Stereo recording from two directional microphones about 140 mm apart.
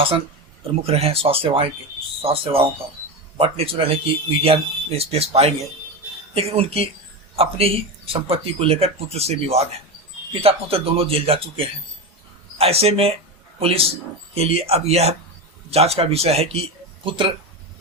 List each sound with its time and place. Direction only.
0.8 s speech: 45° right (ahead or behind)